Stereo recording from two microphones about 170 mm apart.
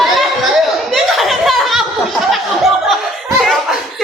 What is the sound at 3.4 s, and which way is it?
Laughter, centre (ahead or behind).